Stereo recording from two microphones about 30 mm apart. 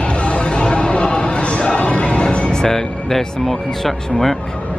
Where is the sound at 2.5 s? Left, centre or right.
Left.